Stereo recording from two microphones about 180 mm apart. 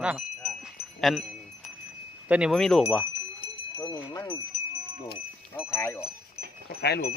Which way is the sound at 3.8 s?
25° left (ahead or behind).